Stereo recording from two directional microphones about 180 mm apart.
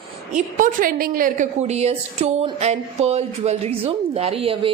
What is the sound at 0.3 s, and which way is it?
A woman's voice, 45° right (ahead or behind).